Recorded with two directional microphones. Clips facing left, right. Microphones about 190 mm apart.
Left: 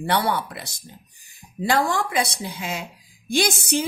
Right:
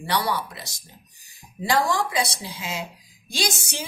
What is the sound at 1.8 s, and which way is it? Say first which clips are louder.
Speech: left 1 dB; 55° left (ahead or behind).